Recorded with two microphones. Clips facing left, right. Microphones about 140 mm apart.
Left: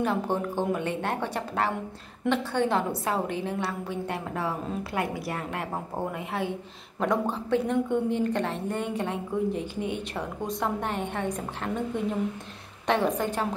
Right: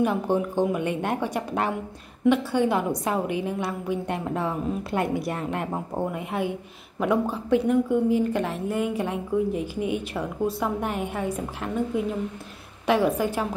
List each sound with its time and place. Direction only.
0.0 s a woman's voice: 15° right (ahead or behind)